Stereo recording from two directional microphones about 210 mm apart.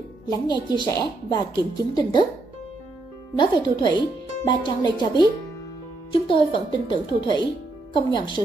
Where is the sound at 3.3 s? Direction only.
20° left (ahead or behind).